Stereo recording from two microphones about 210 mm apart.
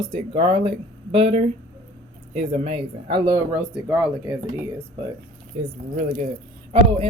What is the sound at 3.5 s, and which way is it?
Speech, 5° right (ahead or behind).